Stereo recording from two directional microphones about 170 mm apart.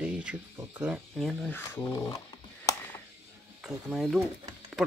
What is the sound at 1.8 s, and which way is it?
Computer keyboard, 20° left (ahead or behind).